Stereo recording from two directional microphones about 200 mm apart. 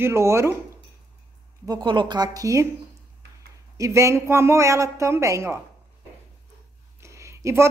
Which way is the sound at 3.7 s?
15° right (ahead or behind).